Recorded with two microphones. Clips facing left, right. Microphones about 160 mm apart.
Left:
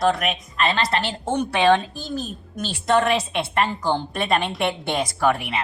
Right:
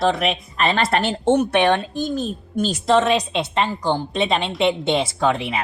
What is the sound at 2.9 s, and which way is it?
A woman's voice, 20° right (ahead or behind).